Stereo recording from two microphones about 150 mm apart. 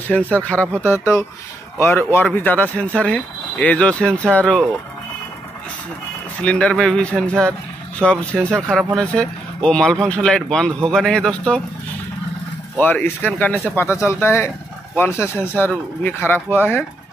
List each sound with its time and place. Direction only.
0.1 s speech: 5° left (ahead or behind)
0.8 s speech: 15° left (ahead or behind)
6.4 s speech: 10° left (ahead or behind)
12.7 s speech: 10° left (ahead or behind)